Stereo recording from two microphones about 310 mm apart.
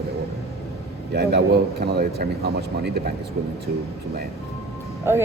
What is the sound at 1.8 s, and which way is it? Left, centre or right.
Speech, right.